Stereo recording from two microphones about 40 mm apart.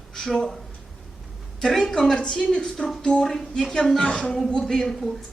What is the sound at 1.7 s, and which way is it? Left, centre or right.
A man's voice, centre.